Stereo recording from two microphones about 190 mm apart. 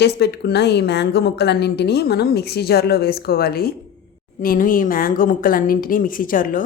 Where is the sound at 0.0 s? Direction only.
60° left (ahead or behind).